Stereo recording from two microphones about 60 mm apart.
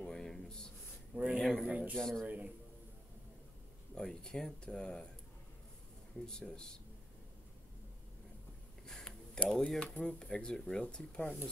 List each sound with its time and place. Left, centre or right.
0.0 s a sound: centre
1.1 s speech: right
2.0 s speech: centre
2.2 s speech: right
3.9 s speech: centre
6.2 s speech: centre
8.8 s a sound: centre
9.5 s speech: centre